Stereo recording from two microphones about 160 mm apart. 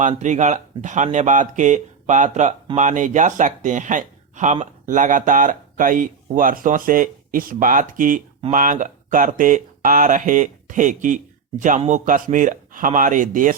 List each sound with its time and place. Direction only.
0.0 s speech: 50° right (ahead or behind)